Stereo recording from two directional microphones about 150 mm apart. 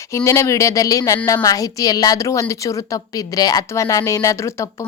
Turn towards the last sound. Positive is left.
turn(degrees=20)  # may be behind; listen again after turning